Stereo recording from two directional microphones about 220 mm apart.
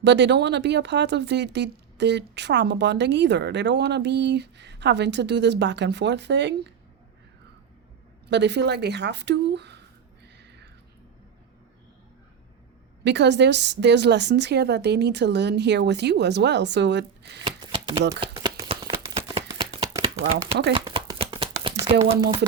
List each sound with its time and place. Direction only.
0.0 s speech: 50° right (ahead or behind)
8.3 s speech: 50° right (ahead or behind)
13.1 s speech: 50° right (ahead or behind)
17.4 s shuffling cards: 20° right (ahead or behind)
18.2 s a sound: 20° right (ahead or behind)
22.1 s speech: 25° right (ahead or behind)